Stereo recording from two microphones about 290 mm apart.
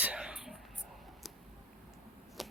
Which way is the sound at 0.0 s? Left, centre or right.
Centre.